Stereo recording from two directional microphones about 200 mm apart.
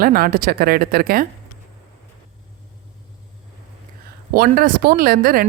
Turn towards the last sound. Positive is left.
turn(degrees=-45)  # may be behind; listen again after turning